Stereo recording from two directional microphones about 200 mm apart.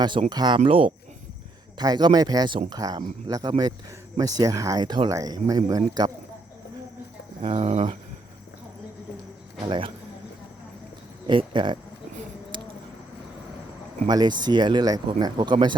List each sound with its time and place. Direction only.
0.3 s speech: 20° right (ahead or behind)
7.4 s speech: 30° right (ahead or behind)
9.6 s speech: 25° right (ahead or behind)
11.3 s speech: 25° right (ahead or behind)
12.5 s a sound: 25° right (ahead or behind)
14.1 s speech: 20° right (ahead or behind)